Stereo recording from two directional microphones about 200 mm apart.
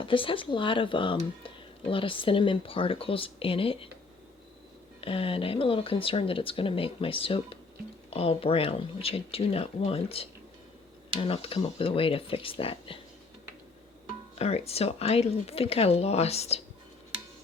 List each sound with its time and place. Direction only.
0.0 s speech: 25° left (ahead or behind)
4.9 s speech: 25° left (ahead or behind)
14.3 s speech: 30° left (ahead or behind)